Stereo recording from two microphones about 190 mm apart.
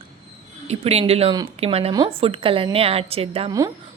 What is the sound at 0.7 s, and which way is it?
A woman's voice, 35° right (ahead or behind).